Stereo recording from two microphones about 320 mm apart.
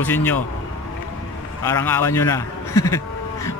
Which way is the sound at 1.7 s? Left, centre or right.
Centre.